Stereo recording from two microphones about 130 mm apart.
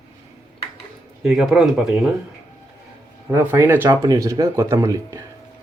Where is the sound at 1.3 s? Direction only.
5° right (ahead or behind).